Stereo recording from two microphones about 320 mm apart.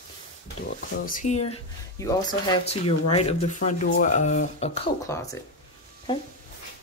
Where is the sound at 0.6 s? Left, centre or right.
Left.